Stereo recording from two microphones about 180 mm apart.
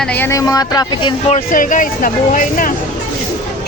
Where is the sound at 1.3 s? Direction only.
45° left (ahead or behind).